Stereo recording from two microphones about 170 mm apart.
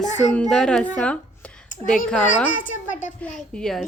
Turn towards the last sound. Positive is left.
turn(degrees=5)  # may be behind; listen again after turning